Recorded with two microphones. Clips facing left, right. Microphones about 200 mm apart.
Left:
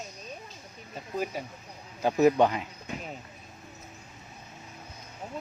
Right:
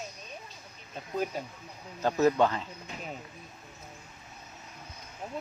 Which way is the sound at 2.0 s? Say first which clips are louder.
Left 3 dB; 15° left (ahead or behind).